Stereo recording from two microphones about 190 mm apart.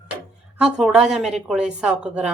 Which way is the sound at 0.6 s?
5° right (ahead or behind).